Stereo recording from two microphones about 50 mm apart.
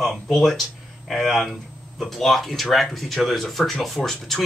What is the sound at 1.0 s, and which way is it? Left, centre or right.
Speech, centre.